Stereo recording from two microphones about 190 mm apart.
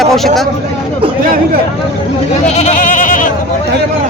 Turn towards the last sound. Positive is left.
turn(degrees=45)  # may be behind; listen again after turning